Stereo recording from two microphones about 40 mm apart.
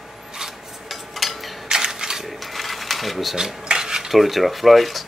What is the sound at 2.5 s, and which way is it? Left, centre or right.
Mechanisms, centre.